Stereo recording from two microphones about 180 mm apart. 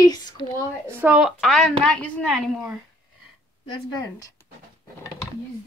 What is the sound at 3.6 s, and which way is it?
Speech, 20° left (ahead or behind).